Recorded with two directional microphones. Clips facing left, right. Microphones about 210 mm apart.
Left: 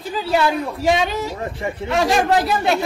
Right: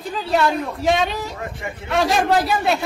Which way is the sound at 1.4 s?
30° left (ahead or behind).